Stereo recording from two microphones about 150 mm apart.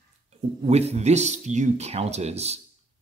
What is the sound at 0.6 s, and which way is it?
Speech, 45° right (ahead or behind).